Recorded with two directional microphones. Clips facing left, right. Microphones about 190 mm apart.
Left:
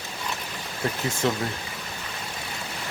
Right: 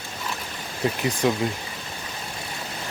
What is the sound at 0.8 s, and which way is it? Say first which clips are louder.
Speech: right 3 dB; 20° right (ahead or behind).